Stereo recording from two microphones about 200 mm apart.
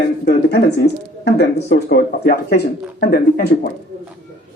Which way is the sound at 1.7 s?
50° left (ahead or behind).